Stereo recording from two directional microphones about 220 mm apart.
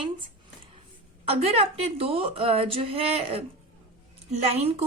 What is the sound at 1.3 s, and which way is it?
Speech, 25° right (ahead or behind).